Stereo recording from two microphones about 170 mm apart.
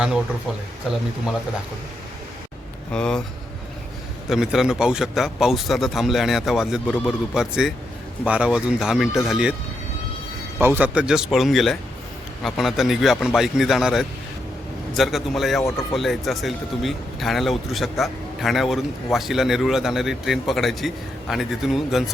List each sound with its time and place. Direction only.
2.9 s speech: 5° left (ahead or behind)
4.3 s speech: centre (ahead or behind)
10.6 s speech: 10° right (ahead or behind)